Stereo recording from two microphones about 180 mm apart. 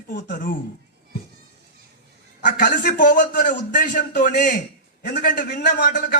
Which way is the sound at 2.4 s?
45° left (ahead or behind).